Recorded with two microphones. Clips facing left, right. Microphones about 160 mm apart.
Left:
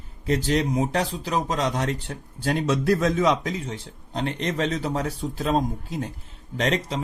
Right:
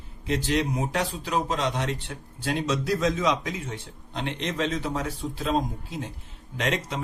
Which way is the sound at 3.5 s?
35° left (ahead or behind).